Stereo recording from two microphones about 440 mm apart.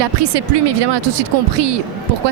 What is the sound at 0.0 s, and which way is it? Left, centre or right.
Speech, right.